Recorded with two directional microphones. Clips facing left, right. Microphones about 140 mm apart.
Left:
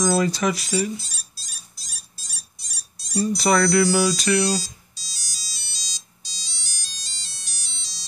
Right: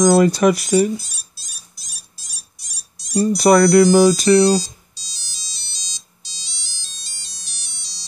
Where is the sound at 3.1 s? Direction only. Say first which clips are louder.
Right 7 dB; 45° right (ahead or behind).